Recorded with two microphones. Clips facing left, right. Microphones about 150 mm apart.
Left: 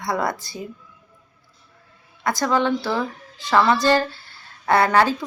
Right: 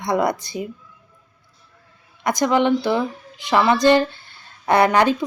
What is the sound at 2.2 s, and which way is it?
Speech, 20° right (ahead or behind).